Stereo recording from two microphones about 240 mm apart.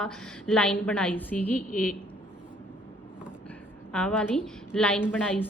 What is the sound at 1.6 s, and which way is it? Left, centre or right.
Speech, left.